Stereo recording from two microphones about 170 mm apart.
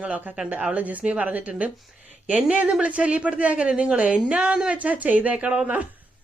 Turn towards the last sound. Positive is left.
turn(degrees=-10)  # may be behind; listen again after turning